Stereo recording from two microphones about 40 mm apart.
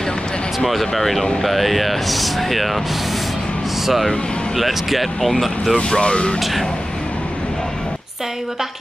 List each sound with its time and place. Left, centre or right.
0.6 s speech: centre
3.8 s speech: centre
5.8 s speech: left